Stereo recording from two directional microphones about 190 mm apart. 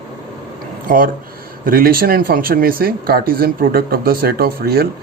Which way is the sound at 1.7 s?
50° right (ahead or behind).